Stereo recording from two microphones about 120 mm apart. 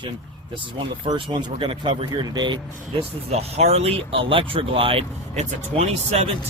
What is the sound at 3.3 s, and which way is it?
Speech, 60° right (ahead or behind).